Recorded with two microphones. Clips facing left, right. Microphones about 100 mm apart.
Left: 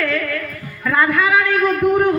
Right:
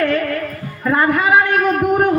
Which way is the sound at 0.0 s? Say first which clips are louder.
Right 4 dB; 35° right (ahead or behind).